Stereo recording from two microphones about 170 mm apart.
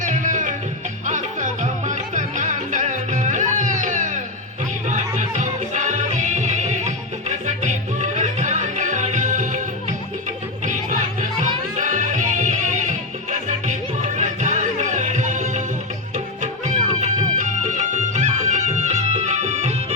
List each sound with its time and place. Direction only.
0.0 s music: 50° right (ahead or behind)
11.8 s music: 50° right (ahead or behind)